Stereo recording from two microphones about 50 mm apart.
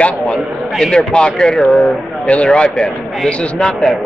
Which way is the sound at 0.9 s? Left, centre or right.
Centre.